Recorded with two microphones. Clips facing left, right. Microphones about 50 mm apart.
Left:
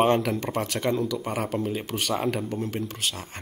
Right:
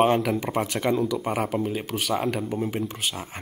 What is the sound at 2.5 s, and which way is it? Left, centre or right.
Speech, centre.